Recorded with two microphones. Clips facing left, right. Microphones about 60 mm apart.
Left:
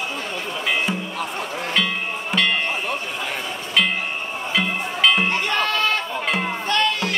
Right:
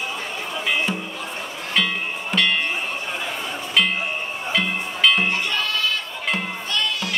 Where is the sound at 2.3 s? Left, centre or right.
Centre.